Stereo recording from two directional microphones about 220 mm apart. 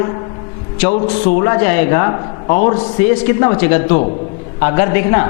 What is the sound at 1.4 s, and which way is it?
Speech, 15° left (ahead or behind).